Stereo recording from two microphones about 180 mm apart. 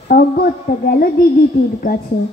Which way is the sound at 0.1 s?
55° left (ahead or behind).